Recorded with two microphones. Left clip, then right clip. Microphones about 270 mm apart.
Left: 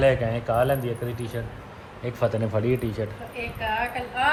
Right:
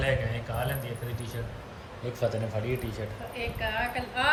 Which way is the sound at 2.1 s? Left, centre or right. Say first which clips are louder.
Left 6 dB; centre.